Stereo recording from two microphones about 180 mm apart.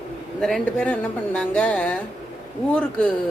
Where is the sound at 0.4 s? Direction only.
5° left (ahead or behind).